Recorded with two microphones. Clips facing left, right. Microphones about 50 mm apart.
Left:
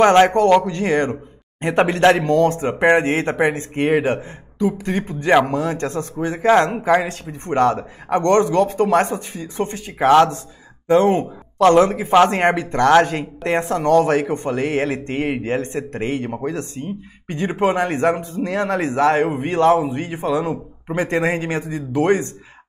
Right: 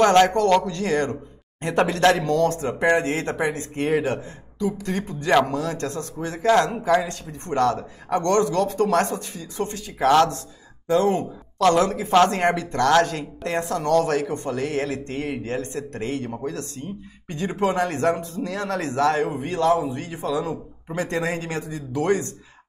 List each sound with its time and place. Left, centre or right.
0.0 s speech: left